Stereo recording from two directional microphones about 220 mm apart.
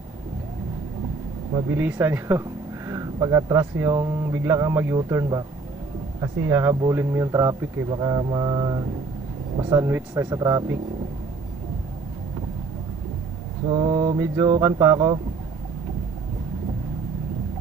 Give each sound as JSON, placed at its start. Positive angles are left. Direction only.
{"t": 1.5, "sound": "speech", "side_deg": -10}
{"t": 13.7, "sound": "speech", "side_deg": -20}